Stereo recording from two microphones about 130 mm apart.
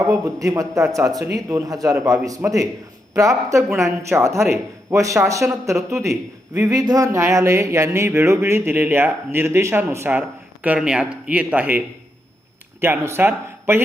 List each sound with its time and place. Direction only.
0.1 s speech: 25° right (ahead or behind)
12.8 s speech: 15° right (ahead or behind)